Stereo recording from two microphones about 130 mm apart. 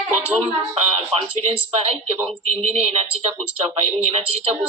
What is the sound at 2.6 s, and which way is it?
Speech, 55° right (ahead or behind).